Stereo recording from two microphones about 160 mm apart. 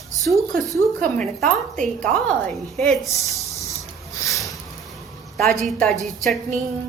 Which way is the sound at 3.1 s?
20° left (ahead or behind).